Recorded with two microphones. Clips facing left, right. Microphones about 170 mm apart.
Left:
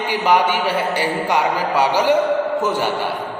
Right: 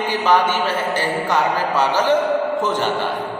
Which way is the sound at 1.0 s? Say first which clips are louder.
Left 1 dB; 10° left (ahead or behind).